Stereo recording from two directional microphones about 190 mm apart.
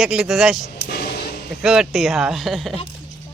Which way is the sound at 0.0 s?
5° right (ahead or behind).